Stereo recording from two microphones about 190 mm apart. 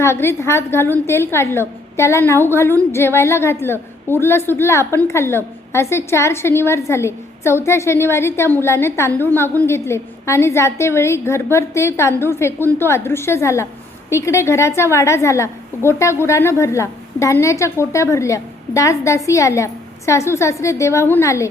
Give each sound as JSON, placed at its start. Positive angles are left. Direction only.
{"t": 0.0, "sound": "a woman's voice", "side_deg": 15}